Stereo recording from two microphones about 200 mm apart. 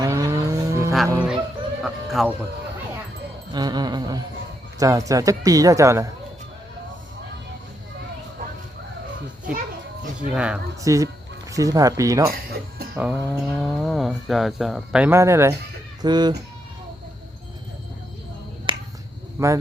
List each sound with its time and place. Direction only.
0.0 s moo: 15° right (ahead or behind)
1.0 s a man's voice: 15° right (ahead or behind)
1.8 s speech: centre (ahead or behind)
3.5 s music: 20° right (ahead or behind)
4.8 s a man's voice: 15° right (ahead or behind)
10.2 s speech: 5° right (ahead or behind)
10.8 s a man's voice: 15° right (ahead or behind)
13.4 s speech: centre (ahead or behind); by 16.4 s 20° right (ahead or behind)
19.4 s a man's voice: 15° right (ahead or behind)